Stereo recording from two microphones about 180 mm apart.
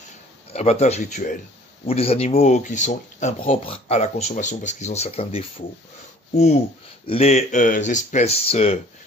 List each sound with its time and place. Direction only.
0.5 s speech: 35° left (ahead or behind)